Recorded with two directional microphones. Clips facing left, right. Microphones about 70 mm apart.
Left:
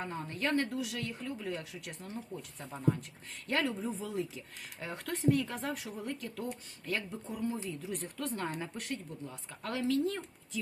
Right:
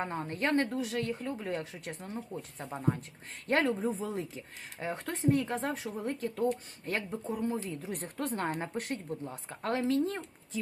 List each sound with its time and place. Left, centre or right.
0.0 s a woman's voice: right